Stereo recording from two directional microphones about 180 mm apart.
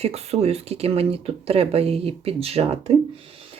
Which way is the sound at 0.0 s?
35° right (ahead or behind).